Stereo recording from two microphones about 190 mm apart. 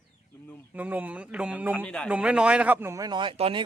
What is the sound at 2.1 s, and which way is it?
Speech, 5° right (ahead or behind).